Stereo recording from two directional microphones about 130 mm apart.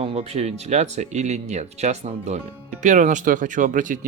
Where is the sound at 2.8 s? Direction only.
70° right (ahead or behind); by 4.0 s 90° right.